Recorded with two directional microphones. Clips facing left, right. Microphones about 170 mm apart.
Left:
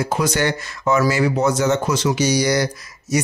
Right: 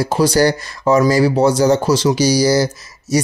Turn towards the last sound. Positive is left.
turn(degrees=-30)  # may be behind; listen again after turning